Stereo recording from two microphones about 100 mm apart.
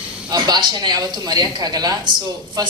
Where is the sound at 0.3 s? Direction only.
45° right (ahead or behind).